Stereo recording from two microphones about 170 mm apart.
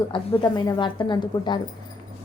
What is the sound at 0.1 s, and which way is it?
A woman's voice, 25° left (ahead or behind).